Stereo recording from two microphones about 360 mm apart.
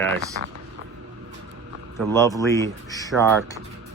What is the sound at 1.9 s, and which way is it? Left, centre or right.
Speech, centre.